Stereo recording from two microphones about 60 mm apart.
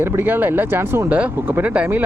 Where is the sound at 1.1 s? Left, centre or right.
Right.